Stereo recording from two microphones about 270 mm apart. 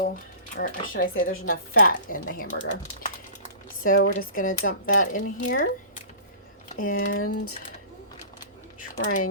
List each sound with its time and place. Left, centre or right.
0.5 s speech: left
3.8 s speech: left
6.7 s speech: left
7.2 s a sound: left
8.9 s speech: left